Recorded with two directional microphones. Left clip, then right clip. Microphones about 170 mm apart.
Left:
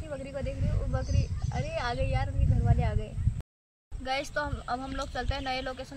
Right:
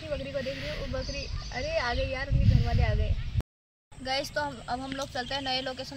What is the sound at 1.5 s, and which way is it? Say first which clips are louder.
Speech: right 3 dB; 20° left (ahead or behind).